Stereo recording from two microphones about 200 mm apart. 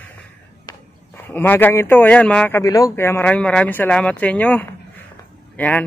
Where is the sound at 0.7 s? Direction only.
10° left (ahead or behind).